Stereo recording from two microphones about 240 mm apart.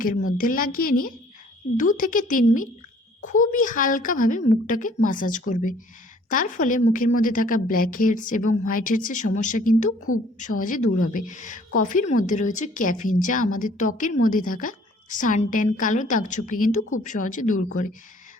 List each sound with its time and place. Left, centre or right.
0.3 s a woman's voice: left